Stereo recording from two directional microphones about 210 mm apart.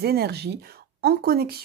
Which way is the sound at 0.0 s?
50° right (ahead or behind).